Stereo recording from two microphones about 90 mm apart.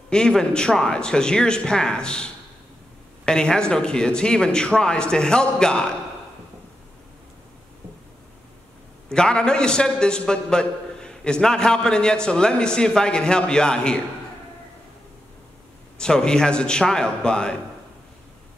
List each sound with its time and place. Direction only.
0.1 s a man's voice: 10° left (ahead or behind)
9.1 s a man's voice: 10° left (ahead or behind)
16.0 s a man's voice: 10° left (ahead or behind)